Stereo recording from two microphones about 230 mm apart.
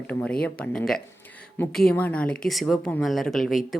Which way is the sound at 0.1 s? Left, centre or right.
Centre.